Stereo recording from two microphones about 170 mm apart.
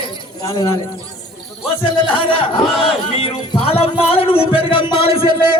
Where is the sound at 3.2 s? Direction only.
30° left (ahead or behind).